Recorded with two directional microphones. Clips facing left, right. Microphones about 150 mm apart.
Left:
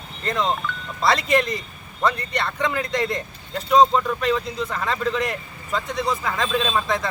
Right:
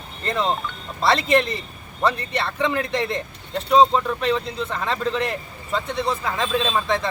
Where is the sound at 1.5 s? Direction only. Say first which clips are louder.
Even; centre (ahead or behind).